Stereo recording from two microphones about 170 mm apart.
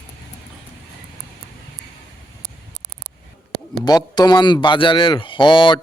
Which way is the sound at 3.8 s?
25° left (ahead or behind).